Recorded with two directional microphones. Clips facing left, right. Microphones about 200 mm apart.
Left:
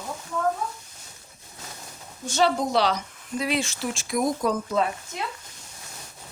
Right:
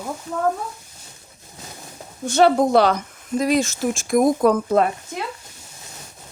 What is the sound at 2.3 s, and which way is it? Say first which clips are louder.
Speech: right 7 dB; 55° right (ahead or behind).